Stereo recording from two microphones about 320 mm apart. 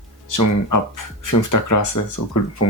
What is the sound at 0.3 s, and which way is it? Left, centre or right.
Speech, left.